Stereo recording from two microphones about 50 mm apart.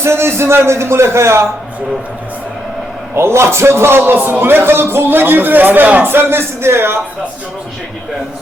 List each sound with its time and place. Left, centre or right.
0.0 s a man's voice: right
3.2 s a man's voice: right